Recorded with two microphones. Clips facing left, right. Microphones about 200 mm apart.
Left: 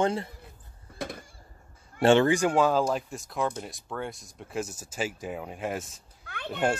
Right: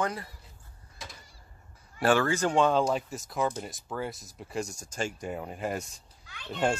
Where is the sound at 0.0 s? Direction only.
25° left (ahead or behind).